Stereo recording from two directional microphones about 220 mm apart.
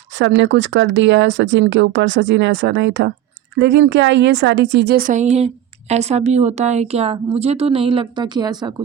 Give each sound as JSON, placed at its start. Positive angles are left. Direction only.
{"t": 0.2, "sound": "speech", "side_deg": -55}